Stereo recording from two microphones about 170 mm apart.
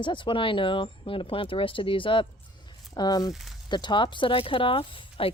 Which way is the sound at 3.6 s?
25° left (ahead or behind).